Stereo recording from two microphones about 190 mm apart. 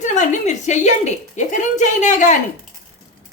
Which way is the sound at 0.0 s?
40° left (ahead or behind).